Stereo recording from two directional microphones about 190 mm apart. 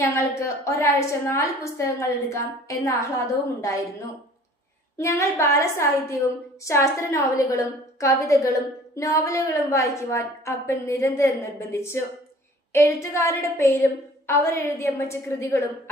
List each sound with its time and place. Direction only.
0.0 s a woman's voice: 15° left (ahead or behind)
4.9 s a woman's voice: 15° left (ahead or behind)